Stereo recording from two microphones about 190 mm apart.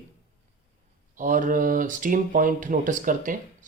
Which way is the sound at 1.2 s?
45° right (ahead or behind).